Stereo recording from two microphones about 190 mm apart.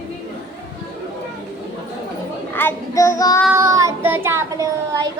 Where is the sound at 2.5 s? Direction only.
10° left (ahead or behind).